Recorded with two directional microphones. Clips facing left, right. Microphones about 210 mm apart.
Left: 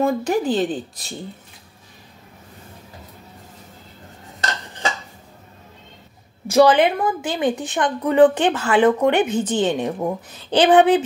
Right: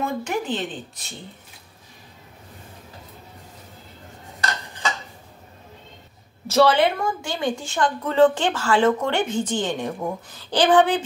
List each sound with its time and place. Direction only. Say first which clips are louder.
0.0 s speech: left 7 dB; 35° left (ahead or behind)
6.4 s a woman's voice: left 3 dB; 15° left (ahead or behind)